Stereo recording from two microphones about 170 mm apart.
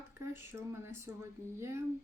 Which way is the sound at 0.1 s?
15° right (ahead or behind).